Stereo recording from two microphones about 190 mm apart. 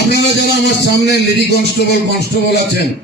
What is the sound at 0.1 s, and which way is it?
A man's voice, 60° left (ahead or behind).